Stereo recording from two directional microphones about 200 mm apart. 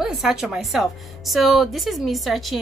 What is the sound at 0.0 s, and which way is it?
A woman's voice, centre (ahead or behind).